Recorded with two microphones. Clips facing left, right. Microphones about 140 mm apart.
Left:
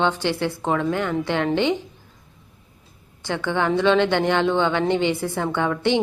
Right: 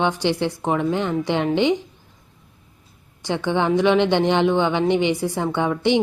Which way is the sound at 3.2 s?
15° right (ahead or behind).